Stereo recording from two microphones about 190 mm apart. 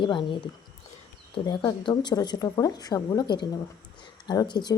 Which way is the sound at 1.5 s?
25° left (ahead or behind).